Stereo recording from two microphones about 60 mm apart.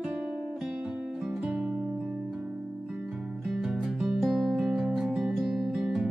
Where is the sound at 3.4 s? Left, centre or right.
Centre.